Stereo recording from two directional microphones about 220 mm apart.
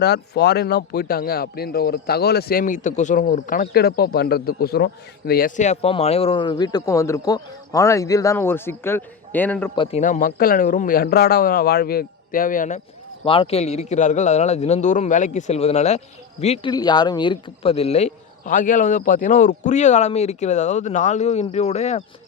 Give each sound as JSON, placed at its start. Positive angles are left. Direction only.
{"t": 0.0, "sound": "a man's voice", "side_deg": 50}
{"t": 9.7, "sound": "speech", "side_deg": 20}
{"t": 10.0, "sound": "a man's voice", "side_deg": 35}
{"t": 13.2, "sound": "speech", "side_deg": 25}
{"t": 16.7, "sound": "a man's voice", "side_deg": 20}